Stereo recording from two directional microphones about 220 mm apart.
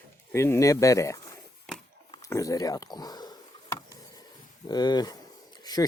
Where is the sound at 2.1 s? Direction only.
15° left (ahead or behind).